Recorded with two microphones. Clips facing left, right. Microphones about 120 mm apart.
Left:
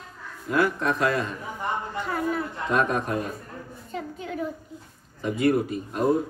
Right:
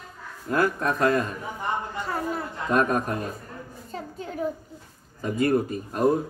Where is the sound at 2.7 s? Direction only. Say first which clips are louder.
Right 1 dB; 45° right (ahead or behind).